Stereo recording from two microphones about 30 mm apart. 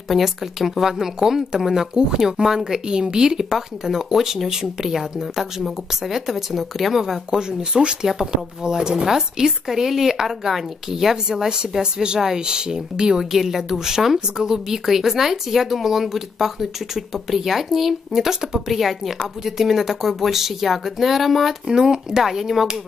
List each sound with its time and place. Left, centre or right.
0.1 s speech: centre
2.0 s speech: right; by 7.2 s centre
7.2 s speech: right
9.0 s speech: centre
11.4 s speech: right
14.9 s speech: centre
18.7 s speech: centre
21.6 s speech: right
22.2 s speech: centre